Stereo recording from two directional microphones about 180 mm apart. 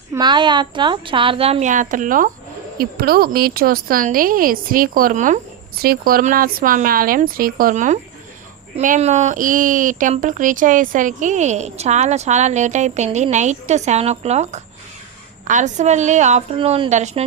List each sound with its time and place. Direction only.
0.1 s a woman's voice: 25° right (ahead or behind); by 5.4 s 45° right (ahead or behind)
5.8 s a woman's voice: 55° right (ahead or behind); by 17.2 s 35° right (ahead or behind)